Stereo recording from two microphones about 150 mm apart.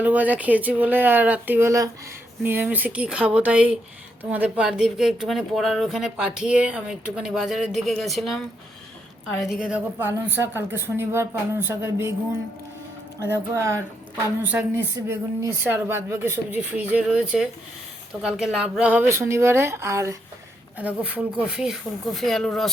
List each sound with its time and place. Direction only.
0.0 s speech: 10° right (ahead or behind)
9.4 s speech: 5° right (ahead or behind)
13.2 s speech: 20° right (ahead or behind); by 22.7 s 5° left (ahead or behind)